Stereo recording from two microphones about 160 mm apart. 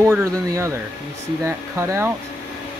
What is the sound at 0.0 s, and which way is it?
Speech, 20° right (ahead or behind).